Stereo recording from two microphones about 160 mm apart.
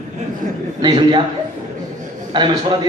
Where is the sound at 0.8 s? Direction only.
25° right (ahead or behind).